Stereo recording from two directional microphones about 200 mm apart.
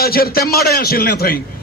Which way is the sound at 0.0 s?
50° left (ahead or behind).